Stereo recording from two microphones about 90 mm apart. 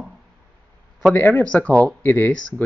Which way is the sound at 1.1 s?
15° left (ahead or behind).